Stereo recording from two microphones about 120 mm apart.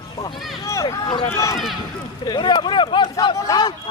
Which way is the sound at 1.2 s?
25° left (ahead or behind).